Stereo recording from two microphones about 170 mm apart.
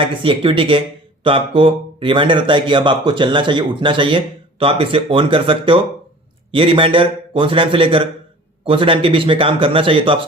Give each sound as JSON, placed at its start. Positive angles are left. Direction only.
{"t": 0.0, "sound": "a man's voice", "side_deg": -30}